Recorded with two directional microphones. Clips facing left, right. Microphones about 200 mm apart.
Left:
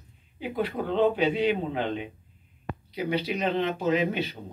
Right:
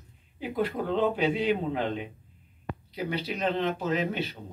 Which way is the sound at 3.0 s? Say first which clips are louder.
Left 2 dB; 5° left (ahead or behind).